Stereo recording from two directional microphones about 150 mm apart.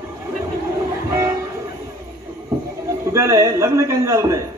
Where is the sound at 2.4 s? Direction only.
20° right (ahead or behind).